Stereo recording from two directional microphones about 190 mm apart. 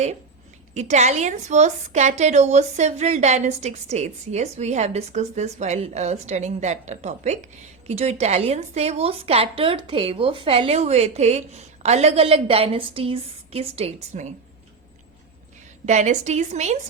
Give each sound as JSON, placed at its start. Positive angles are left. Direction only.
{"t": 0.7, "sound": "a woman's voice", "side_deg": -35}
{"t": 15.9, "sound": "a woman's voice", "side_deg": -40}